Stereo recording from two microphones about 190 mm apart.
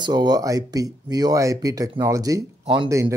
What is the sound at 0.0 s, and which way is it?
Speech, 20° right (ahead or behind).